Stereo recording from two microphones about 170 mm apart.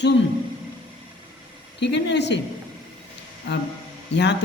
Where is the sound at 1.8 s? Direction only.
90° left.